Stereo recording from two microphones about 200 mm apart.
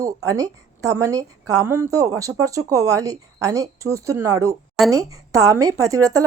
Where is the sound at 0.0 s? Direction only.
15° right (ahead or behind).